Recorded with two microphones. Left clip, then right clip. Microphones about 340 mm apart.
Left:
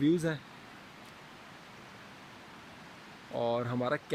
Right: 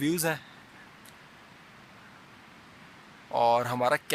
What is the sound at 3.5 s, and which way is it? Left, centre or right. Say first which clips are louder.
Speech: right 7 dB; centre.